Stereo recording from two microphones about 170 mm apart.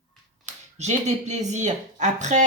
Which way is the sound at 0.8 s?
40° right (ahead or behind).